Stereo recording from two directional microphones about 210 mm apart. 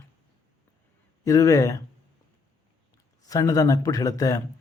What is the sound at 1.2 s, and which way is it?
Speech, 15° left (ahead or behind).